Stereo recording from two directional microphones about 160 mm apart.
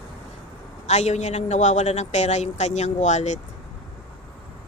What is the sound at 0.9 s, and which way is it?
Speech, 45° left (ahead or behind).